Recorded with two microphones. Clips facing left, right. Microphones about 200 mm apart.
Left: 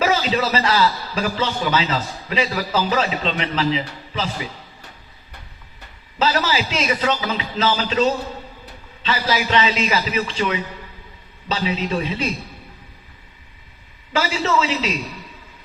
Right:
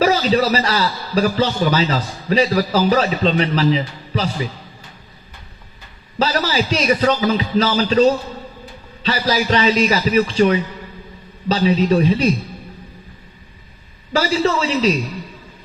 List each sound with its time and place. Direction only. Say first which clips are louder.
0.0 s a man's voice: right 4 dB; 35° right (ahead or behind)
6.1 s a man's voice: right 2 dB; 35° right (ahead or behind)
14.1 s a man's voice: right 4 dB; 35° right (ahead or behind)